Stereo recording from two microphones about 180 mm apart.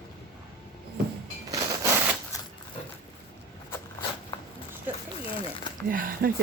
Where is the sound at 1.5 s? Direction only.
15° right (ahead or behind).